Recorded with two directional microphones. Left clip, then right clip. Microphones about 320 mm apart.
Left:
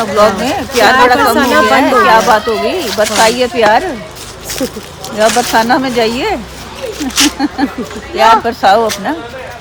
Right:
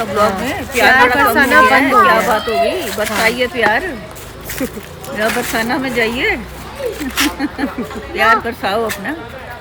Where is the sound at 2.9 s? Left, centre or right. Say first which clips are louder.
Left 6 dB; centre.